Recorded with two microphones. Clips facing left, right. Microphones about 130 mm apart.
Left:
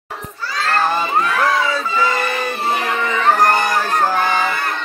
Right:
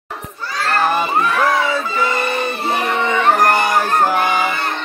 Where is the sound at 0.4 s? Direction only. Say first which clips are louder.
Right 1 dB; 15° right (ahead or behind).